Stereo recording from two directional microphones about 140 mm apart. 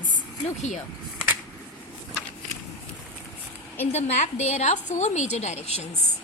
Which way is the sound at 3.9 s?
50° left (ahead or behind).